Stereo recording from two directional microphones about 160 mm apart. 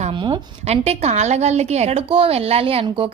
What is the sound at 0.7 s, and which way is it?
A woman's voice, 40° right (ahead or behind).